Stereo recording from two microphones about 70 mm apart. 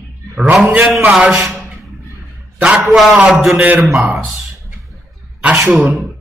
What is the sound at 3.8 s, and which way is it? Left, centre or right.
Speech, centre.